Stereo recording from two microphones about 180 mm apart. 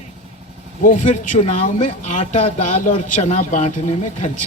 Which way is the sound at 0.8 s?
45° left (ahead or behind).